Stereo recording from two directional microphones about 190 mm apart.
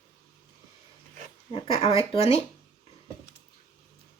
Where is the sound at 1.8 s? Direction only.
30° left (ahead or behind).